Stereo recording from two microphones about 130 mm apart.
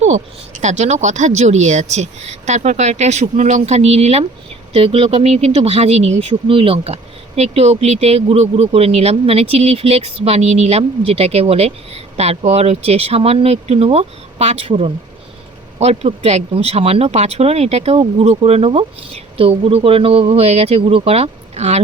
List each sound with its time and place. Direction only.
0.0 s speech: 65° right (ahead or behind)